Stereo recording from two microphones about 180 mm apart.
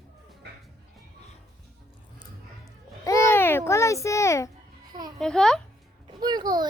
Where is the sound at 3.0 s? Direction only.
15° left (ahead or behind).